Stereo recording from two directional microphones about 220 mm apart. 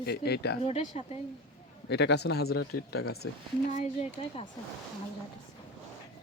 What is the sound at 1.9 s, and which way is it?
Speech, 50° left (ahead or behind).